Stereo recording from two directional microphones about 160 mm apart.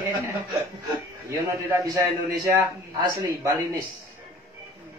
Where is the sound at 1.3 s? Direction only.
20° right (ahead or behind).